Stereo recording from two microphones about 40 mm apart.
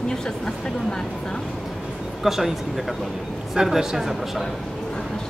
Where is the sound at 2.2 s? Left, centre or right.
Centre.